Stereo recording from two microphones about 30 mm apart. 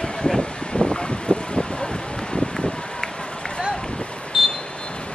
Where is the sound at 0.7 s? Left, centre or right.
Left.